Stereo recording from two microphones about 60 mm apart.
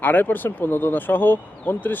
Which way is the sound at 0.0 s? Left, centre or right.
Left.